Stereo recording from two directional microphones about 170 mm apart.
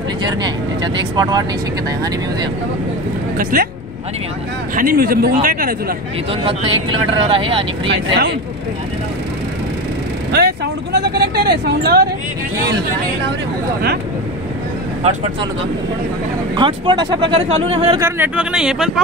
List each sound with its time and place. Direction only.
0.2 s speech: 25° right (ahead or behind)
3.5 s speech: 55° right (ahead or behind)
4.7 s speech: 55° right (ahead or behind)
6.4 s speech: 30° right (ahead or behind)
7.9 s speech: 90° right
10.3 s speech: 75° right (ahead or behind)
16.5 s speech: 25° right (ahead or behind)
17.9 s speech: 15° right (ahead or behind)